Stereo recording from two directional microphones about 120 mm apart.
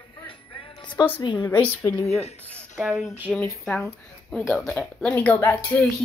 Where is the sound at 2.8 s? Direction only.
5° right (ahead or behind).